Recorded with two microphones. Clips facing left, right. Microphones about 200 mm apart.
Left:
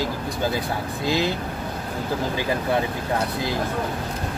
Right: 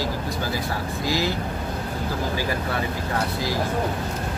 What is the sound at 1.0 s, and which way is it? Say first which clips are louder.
Speech: left 2 dB; 20° left (ahead or behind).